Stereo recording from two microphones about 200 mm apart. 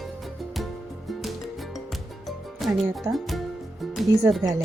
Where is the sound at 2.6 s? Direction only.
Centre (ahead or behind).